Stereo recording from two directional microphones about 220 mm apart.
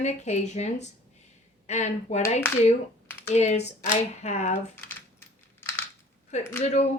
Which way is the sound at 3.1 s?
10° left (ahead or behind).